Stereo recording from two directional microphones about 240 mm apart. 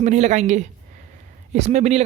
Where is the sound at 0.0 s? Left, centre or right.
Right.